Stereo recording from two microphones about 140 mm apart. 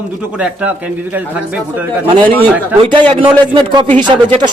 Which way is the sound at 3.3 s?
35° right (ahead or behind).